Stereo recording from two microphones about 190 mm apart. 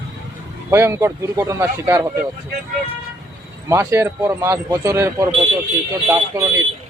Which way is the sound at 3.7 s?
15° right (ahead or behind).